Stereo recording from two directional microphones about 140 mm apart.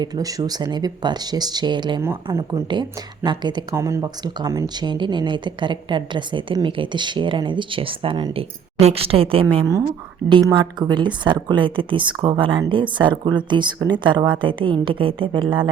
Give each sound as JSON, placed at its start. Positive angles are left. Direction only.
{"t": 0.0, "sound": "speech", "side_deg": -25}
{"t": 2.3, "sound": "speech", "side_deg": -20}
{"t": 3.2, "sound": "speech", "side_deg": -30}
{"t": 3.7, "sound": "speech", "side_deg": -20}